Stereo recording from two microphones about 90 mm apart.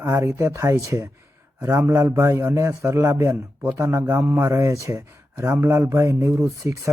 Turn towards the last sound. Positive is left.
turn(degrees=-35)  # may be behind; listen again after turning